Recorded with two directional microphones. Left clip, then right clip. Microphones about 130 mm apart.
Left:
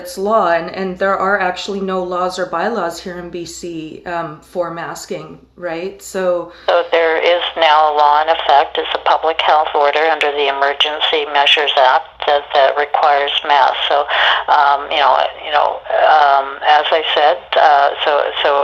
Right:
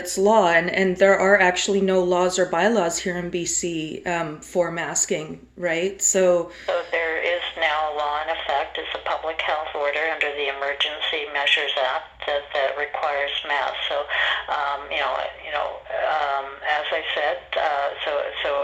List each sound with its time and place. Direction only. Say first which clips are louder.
0.3 s speech: left 4 dB; 50° right (ahead or behind)
6.7 s speech: left 13 dB; 25° left (ahead or behind)